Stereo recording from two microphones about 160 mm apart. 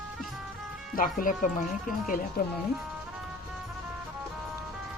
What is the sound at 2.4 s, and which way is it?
Speech, 75° left (ahead or behind).